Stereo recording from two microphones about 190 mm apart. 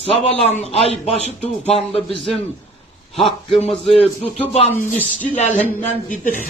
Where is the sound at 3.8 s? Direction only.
30° left (ahead or behind).